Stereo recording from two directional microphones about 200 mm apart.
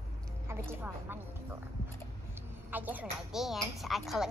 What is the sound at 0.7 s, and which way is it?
Speech, 10° right (ahead or behind).